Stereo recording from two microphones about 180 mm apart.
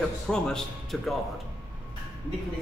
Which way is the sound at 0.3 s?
5° left (ahead or behind).